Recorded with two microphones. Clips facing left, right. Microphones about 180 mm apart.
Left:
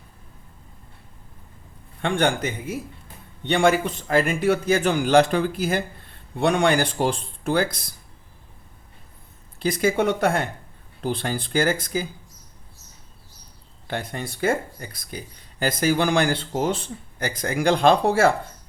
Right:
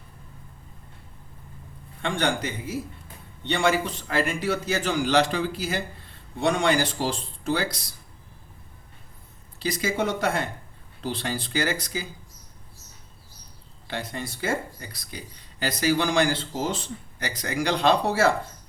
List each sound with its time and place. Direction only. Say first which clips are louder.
2.0 s speech: left 4 dB; 55° left (ahead or behind)
9.6 s speech: left 5 dB; 55° left (ahead or behind)
13.8 s speech: left 3 dB; 55° left (ahead or behind)